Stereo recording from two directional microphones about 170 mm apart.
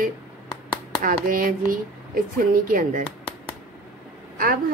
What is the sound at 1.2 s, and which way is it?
A woman's voice, 55° right (ahead or behind).